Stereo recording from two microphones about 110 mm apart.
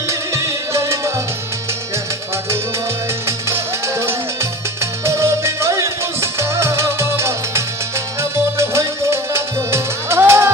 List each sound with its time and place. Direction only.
0.1 s music: 25° right (ahead or behind)
3.2 s music: 25° right (ahead or behind)